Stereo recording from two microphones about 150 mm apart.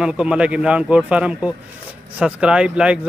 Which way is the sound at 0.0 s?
5° right (ahead or behind).